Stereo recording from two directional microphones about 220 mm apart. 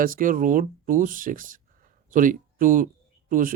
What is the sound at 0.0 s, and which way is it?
Speech, 40° right (ahead or behind).